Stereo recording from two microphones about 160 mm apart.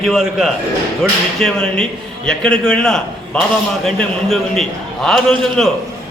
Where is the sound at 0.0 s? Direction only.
Centre (ahead or behind).